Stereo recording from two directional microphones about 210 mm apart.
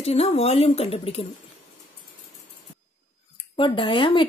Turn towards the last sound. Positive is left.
turn(degrees=25)  # may be behind; listen again after turning